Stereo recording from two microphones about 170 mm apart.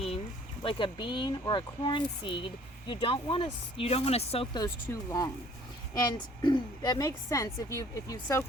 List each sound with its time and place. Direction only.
0.6 s a woman's voice: 30° left (ahead or behind)
4.5 s a woman's voice: 20° left (ahead or behind)